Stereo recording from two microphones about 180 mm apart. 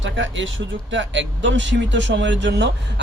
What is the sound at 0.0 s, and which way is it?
Speech, 90° right.